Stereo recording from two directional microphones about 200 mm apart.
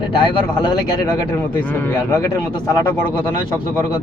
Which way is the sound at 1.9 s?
15° left (ahead or behind).